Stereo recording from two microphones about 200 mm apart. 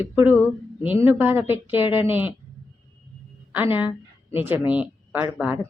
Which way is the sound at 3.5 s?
10° right (ahead or behind).